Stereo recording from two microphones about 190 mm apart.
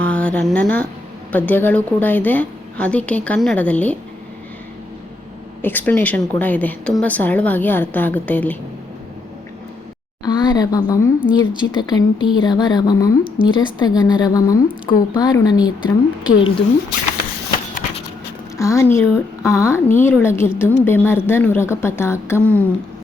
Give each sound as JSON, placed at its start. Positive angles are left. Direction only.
{"t": 0.0, "sound": "a woman's voice", "side_deg": 5}
{"t": 5.6, "sound": "a woman's voice", "side_deg": 10}
{"t": 10.2, "sound": "a woman's voice", "side_deg": 20}
{"t": 18.5, "sound": "a woman's voice", "side_deg": 15}